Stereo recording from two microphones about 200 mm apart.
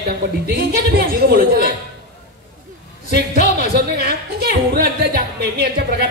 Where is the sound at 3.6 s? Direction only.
50° right (ahead or behind).